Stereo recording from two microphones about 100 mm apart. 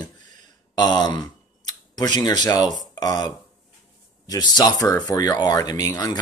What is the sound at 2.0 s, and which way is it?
Speech, 45° left (ahead or behind).